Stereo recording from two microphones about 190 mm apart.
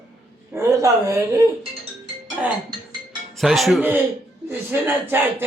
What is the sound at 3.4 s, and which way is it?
Speech, centre (ahead or behind).